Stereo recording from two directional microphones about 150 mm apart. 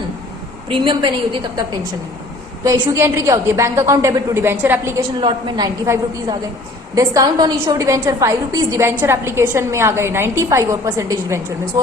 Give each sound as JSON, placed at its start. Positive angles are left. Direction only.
{"t": 0.7, "sound": "a woman's voice", "side_deg": -35}
{"t": 2.6, "sound": "a woman's voice", "side_deg": -20}
{"t": 5.2, "sound": "a woman's voice", "side_deg": -25}